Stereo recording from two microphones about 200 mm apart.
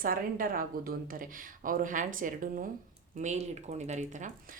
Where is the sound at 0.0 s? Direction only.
45° right (ahead or behind).